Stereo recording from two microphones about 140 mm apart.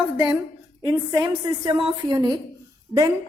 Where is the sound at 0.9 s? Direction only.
25° right (ahead or behind).